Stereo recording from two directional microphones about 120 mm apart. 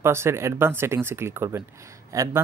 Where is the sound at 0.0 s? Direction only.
20° right (ahead or behind).